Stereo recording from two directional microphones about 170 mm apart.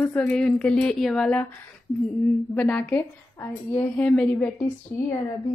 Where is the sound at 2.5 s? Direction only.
10° left (ahead or behind).